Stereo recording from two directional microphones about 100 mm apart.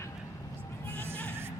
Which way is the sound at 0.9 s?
25° right (ahead or behind).